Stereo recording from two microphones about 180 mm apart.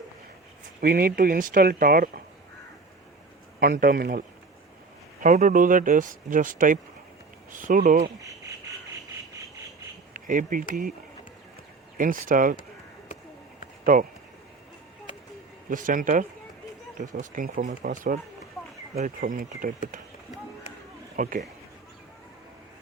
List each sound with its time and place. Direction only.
0.8 s speech: 55° right (ahead or behind)
3.6 s speech: 55° right (ahead or behind)
5.2 s speech: 45° right (ahead or behind)
10.2 s speech: 50° right (ahead or behind)
11.9 s speech: 50° right (ahead or behind)
13.8 s speech: 50° right (ahead or behind)
15.7 s speech: 50° right (ahead or behind)
21.2 s speech: 50° right (ahead or behind)